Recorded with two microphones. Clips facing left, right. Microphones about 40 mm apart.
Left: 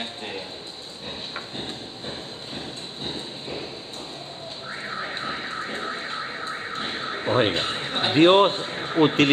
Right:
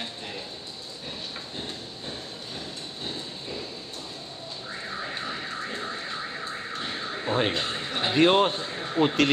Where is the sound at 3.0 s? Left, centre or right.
Left.